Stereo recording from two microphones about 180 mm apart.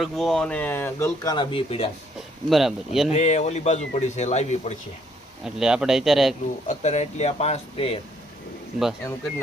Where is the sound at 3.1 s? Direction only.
40° left (ahead or behind).